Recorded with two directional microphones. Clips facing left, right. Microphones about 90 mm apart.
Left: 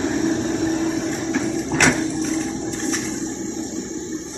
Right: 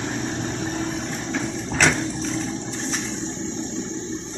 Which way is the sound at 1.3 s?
5° left (ahead or behind).